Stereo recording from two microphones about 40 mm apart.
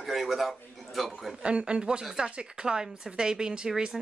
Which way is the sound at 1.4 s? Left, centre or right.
Right.